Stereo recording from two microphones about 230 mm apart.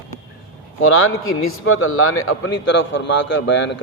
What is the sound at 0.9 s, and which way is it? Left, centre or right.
A man's voice, left.